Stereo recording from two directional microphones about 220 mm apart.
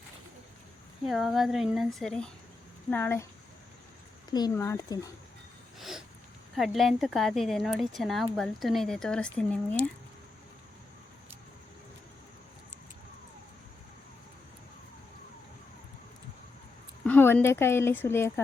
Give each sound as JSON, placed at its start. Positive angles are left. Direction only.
{"t": 1.0, "sound": "speech", "side_deg": 0}
{"t": 4.3, "sound": "speech", "side_deg": 20}
{"t": 6.6, "sound": "speech", "side_deg": 0}
{"t": 17.1, "sound": "speech", "side_deg": 10}